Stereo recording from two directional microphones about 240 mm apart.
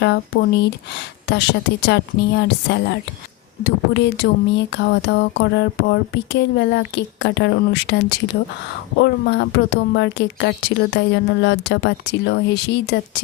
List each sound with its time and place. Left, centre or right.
0.0 s speech: left